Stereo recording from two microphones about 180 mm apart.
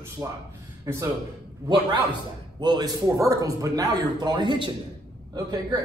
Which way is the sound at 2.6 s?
25° right (ahead or behind).